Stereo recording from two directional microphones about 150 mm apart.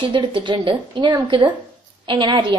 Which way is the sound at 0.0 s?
35° right (ahead or behind).